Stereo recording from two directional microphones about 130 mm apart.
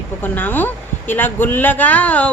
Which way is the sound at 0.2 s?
15° left (ahead or behind).